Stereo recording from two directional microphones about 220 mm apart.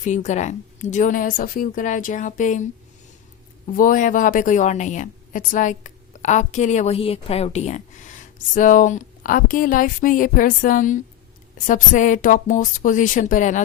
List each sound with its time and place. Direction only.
0.0 s speech: 35° left (ahead or behind)
3.7 s speech: 40° left (ahead or behind)